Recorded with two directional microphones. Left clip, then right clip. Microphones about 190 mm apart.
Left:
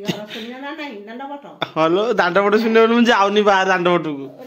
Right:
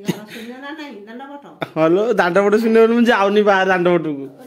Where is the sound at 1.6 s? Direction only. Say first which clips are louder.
Right 1 dB; 30° right (ahead or behind).